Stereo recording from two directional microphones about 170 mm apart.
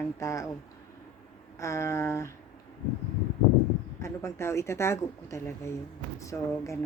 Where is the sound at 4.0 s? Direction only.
15° left (ahead or behind).